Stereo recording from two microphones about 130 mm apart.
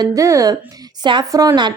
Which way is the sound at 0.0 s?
25° right (ahead or behind).